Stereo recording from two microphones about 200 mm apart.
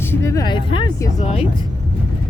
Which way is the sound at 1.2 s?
30° left (ahead or behind).